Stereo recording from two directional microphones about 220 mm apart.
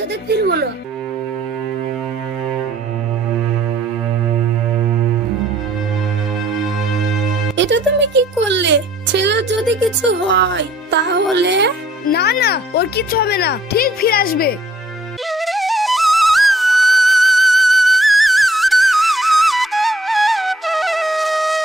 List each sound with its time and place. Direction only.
0.3 s music: 45° right (ahead or behind)
7.5 s music: 55° right (ahead or behind)
10.0 s speech: 55° right (ahead or behind)
12.1 s a child's voice: 45° left (ahead or behind)
15.3 s flute: centre (ahead or behind)